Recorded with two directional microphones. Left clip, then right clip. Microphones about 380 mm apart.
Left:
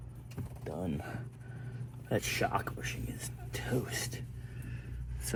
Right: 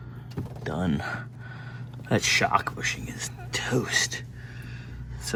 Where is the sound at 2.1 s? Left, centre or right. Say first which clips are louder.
Right 10 dB; right.